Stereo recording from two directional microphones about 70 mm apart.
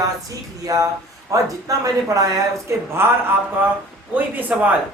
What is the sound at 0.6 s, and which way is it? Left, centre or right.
Speech, right.